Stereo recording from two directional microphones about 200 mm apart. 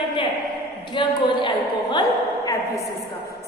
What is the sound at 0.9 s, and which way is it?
A woman's voice, 25° left (ahead or behind).